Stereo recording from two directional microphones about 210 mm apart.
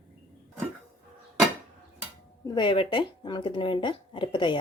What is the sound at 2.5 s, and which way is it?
Speech, 25° left (ahead or behind).